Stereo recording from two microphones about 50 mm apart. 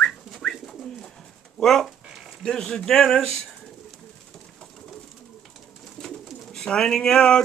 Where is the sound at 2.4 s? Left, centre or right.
Centre.